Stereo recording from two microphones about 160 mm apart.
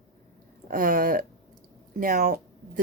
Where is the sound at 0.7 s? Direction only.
60° right (ahead or behind).